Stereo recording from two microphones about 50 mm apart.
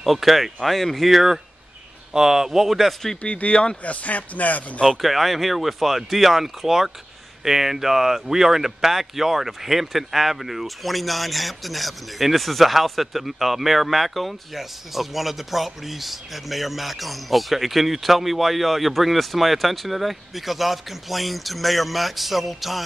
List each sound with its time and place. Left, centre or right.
0.0 s speech: centre
3.2 s speech: left
4.8 s speech: centre